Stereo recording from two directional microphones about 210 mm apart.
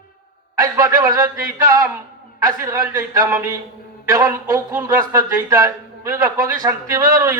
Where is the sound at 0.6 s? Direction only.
15° right (ahead or behind).